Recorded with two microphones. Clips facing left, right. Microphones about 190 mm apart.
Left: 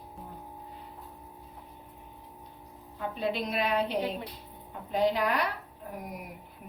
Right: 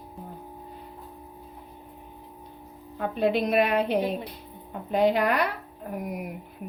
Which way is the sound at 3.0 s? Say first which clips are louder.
Right 7 dB; 60° right (ahead or behind).